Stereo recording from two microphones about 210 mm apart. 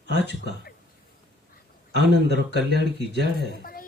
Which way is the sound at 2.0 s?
50° right (ahead or behind).